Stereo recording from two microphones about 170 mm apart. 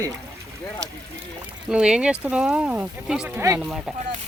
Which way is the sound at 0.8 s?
90° right.